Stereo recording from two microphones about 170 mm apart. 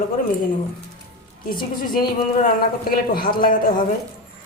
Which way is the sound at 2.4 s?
60° left (ahead or behind).